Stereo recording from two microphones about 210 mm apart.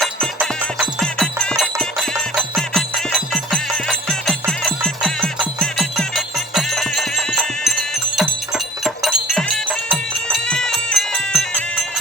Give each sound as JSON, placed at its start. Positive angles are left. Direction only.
{"t": 0.3, "sound": "music", "side_deg": 0}